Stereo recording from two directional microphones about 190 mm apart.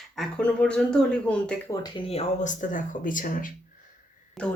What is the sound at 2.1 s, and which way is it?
Speech, 35° left (ahead or behind).